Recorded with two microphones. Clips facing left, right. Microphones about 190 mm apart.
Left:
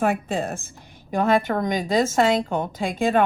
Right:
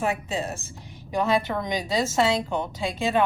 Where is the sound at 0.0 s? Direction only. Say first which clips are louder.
Left 4 dB; 55° left (ahead or behind).